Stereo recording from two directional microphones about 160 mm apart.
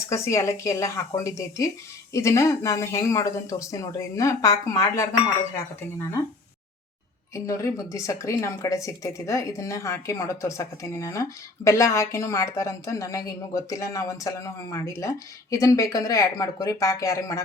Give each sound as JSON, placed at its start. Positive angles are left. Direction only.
{"t": 0.1, "sound": "speech", "side_deg": 20}
{"t": 7.3, "sound": "speech", "side_deg": 20}